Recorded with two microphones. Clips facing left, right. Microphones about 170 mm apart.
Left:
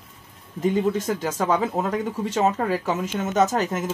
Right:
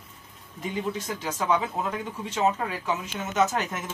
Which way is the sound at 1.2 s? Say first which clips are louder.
Left 4 dB; 45° left (ahead or behind).